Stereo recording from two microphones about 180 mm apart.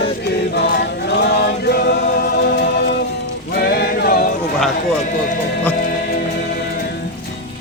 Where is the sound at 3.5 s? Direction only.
65° left (ahead or behind).